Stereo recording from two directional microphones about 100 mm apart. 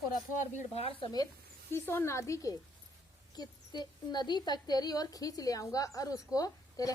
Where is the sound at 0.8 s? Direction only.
70° left (ahead or behind).